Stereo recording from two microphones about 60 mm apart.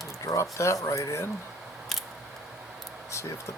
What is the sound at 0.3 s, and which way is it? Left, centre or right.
Speech, left.